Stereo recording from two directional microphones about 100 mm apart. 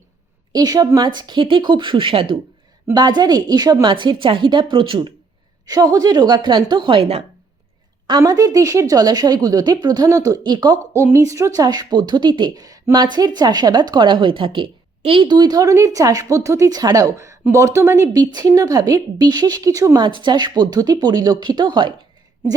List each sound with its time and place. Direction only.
0.5 s a woman's voice: 40° right (ahead or behind); by 2.4 s 65° right (ahead or behind)
2.9 s a woman's voice: 45° right (ahead or behind)
5.6 s a woman's voice: 40° right (ahead or behind); by 7.0 s 55° right (ahead or behind)
7.0 s speech: 90° right
8.2 s speech: 35° right (ahead or behind)
10.9 s a woman's voice: 30° right (ahead or behind); by 15.3 s 65° right (ahead or behind)
15.3 s speech: 45° right (ahead or behind)
20.0 s a woman's voice: 50° right (ahead or behind)